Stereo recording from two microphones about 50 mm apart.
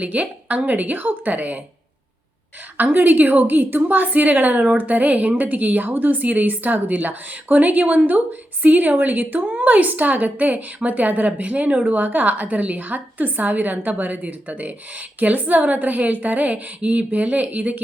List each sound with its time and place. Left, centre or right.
0.0 s speech: right
2.7 s speech: right